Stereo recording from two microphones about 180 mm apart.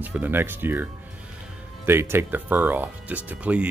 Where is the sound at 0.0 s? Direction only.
10° right (ahead or behind).